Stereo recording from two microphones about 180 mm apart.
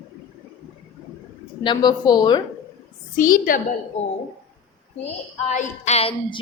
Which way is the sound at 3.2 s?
50° left (ahead or behind).